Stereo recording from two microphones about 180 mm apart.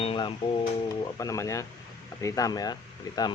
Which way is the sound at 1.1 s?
15° left (ahead or behind).